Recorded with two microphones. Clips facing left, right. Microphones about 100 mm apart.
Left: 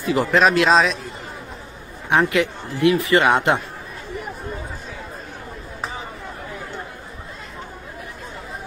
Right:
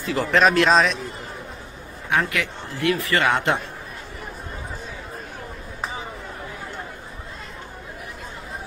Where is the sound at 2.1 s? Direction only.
20° left (ahead or behind).